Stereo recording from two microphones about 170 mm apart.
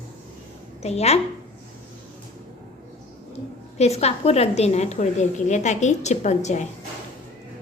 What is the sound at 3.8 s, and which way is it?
A woman's voice, 40° left (ahead or behind).